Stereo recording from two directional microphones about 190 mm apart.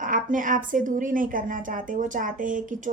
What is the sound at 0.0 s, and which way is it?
A woman's voice, 45° right (ahead or behind).